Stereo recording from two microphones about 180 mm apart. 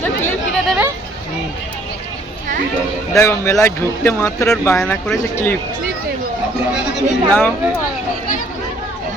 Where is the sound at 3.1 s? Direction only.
15° left (ahead or behind).